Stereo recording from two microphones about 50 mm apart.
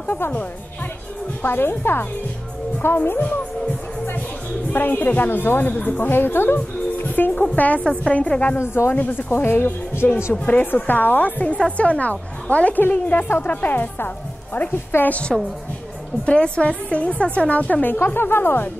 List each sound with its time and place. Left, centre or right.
0.0 s a woman's voice: left
4.7 s a woman's voice: left
5.7 s a woman's voice: left
6.0 s speech: left
7.1 s a woman's voice: left
7.8 s a woman's voice: centre
8.1 s speech: left
8.5 s a woman's voice: left
8.9 s a woman's voice: left
9.3 s speech: left
10.0 s a woman's voice: left
15.0 s speech: left
17.9 s speech: left